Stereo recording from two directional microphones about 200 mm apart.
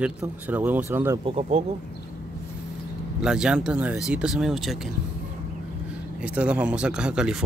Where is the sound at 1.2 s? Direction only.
30° right (ahead or behind).